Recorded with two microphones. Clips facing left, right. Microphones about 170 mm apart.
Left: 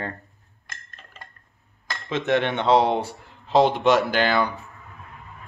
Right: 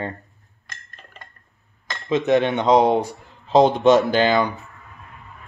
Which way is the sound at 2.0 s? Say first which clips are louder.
Right 5 dB; 15° right (ahead or behind).